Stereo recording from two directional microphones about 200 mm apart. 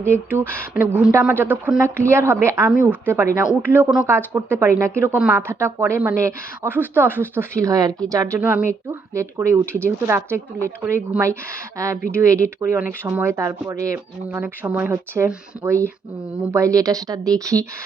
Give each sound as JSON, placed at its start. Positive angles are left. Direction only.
{"t": 0.1, "sound": "speech", "side_deg": -10}